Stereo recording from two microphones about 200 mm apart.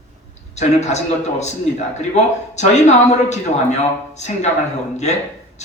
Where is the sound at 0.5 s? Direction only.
35° left (ahead or behind).